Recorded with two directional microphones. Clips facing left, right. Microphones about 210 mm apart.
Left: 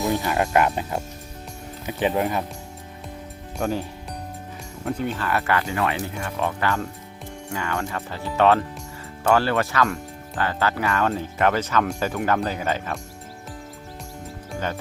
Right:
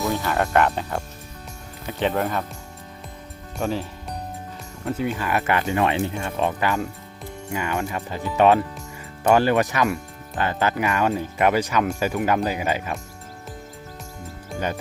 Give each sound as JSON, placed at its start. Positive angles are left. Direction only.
{"t": 0.1, "sound": "speech", "side_deg": 15}
{"t": 3.6, "sound": "speech", "side_deg": 0}
{"t": 4.9, "sound": "speech", "side_deg": -10}